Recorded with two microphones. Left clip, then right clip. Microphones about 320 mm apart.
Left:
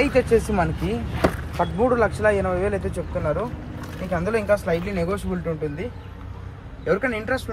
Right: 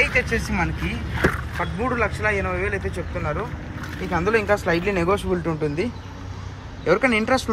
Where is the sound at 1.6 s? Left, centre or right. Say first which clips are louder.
Left 5 dB; centre.